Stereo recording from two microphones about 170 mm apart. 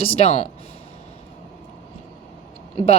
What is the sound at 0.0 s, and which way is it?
Speech, 35° left (ahead or behind).